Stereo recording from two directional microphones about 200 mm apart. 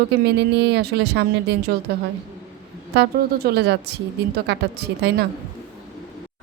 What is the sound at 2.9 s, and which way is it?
Speech, 55° right (ahead or behind).